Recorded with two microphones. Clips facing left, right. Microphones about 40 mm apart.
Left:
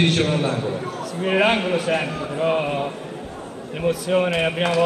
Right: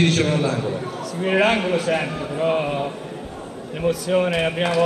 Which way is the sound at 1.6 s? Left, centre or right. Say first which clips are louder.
Even; centre.